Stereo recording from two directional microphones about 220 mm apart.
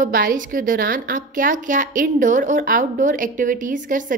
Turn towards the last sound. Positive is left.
turn(degrees=-35)  # may be behind; listen again after turning